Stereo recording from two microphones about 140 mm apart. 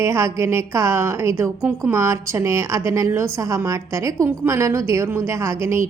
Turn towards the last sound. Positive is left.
turn(degrees=-20)  # may be behind; listen again after turning